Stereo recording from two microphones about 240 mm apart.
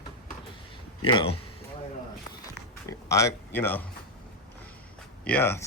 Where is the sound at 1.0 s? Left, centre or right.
Left.